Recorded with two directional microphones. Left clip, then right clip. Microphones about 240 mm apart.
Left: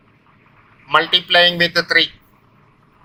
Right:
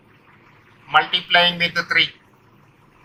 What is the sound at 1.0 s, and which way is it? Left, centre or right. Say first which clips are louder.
Speech: left 3 dB; left.